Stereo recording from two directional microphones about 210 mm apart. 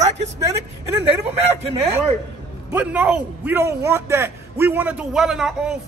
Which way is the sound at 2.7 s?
10° right (ahead or behind).